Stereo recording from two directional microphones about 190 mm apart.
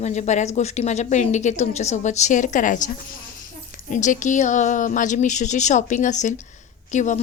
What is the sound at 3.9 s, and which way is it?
A woman's voice, 40° left (ahead or behind).